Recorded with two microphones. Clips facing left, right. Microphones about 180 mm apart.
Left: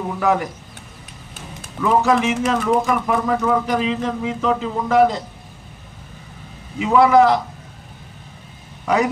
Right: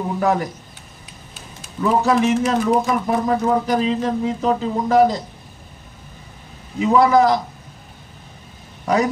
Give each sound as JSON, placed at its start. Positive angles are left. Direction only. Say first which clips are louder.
{"t": 0.2, "sound": "speech", "louder": "left 1 dB", "side_deg": -35}
{"t": 1.8, "sound": "speech", "louder": "even", "side_deg": -40}
{"t": 6.8, "sound": "speech", "louder": "left 1 dB", "side_deg": -40}
{"t": 8.8, "sound": "a man's voice", "louder": "even", "side_deg": -40}